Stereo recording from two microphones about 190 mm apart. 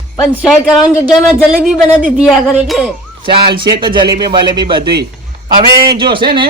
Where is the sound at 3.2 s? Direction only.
25° right (ahead or behind).